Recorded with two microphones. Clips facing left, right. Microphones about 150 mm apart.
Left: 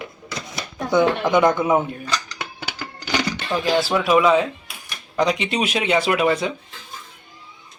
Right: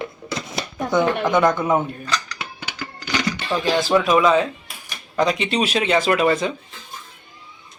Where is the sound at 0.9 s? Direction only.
15° left (ahead or behind).